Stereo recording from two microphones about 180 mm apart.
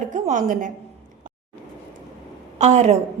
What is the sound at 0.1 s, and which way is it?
Speech, 45° right (ahead or behind).